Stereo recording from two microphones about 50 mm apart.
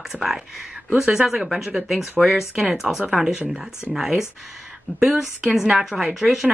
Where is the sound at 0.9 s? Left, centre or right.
Centre.